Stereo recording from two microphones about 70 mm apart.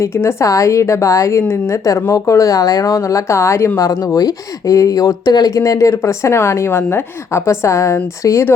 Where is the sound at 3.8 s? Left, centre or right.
Left.